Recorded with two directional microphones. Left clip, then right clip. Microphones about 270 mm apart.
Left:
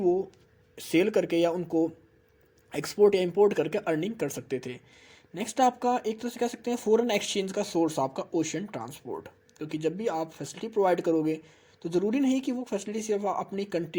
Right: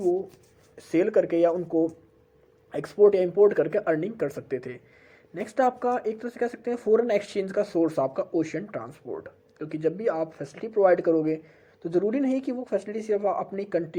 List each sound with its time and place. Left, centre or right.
0.8 s speech: left